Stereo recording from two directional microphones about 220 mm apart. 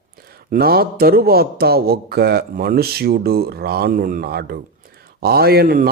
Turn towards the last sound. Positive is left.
turn(degrees=-45)  # may be behind; listen again after turning